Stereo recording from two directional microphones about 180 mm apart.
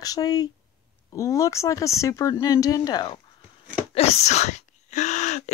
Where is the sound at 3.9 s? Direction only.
35° left (ahead or behind).